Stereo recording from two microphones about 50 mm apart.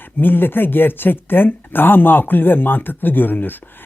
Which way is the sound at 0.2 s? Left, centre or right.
Left.